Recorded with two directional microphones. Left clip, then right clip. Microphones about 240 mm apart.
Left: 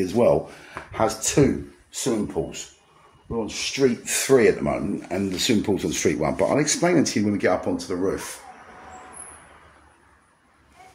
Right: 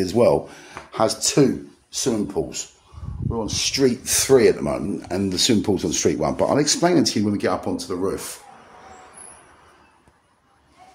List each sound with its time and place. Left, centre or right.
0.0 s speech: centre
3.3 s speech: right